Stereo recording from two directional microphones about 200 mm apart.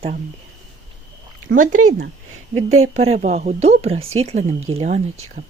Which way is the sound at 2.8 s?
30° right (ahead or behind).